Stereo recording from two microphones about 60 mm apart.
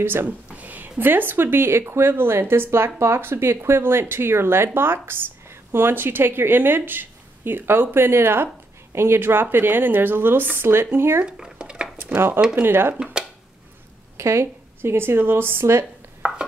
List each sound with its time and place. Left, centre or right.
0.0 s speech: right
0.5 s speech: right
11.2 s dishes: centre
12.4 s speech: centre
12.6 s speech: right
13.0 s a sound: centre
14.1 s speech: right
16.2 s chopping: centre